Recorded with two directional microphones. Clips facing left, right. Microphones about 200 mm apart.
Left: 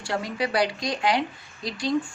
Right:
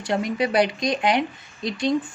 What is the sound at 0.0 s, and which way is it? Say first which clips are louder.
A woman's voice: right 5 dB; 20° right (ahead or behind).